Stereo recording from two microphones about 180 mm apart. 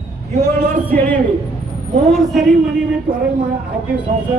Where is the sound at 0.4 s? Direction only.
10° left (ahead or behind).